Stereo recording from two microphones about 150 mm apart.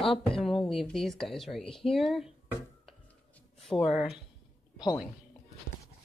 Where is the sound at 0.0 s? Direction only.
35° left (ahead or behind).